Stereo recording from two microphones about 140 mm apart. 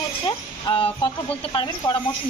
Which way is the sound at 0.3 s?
35° left (ahead or behind).